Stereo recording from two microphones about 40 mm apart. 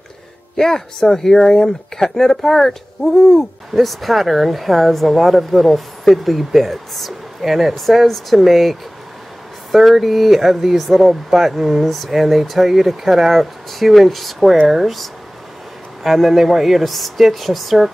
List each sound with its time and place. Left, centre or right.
0.6 s speech: centre